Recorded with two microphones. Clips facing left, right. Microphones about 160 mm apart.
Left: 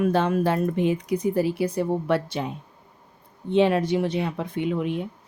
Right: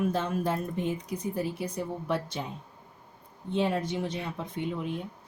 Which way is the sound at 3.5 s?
80° left.